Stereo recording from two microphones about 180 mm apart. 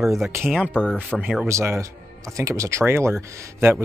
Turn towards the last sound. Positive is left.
turn(degrees=-15)  # may be behind; listen again after turning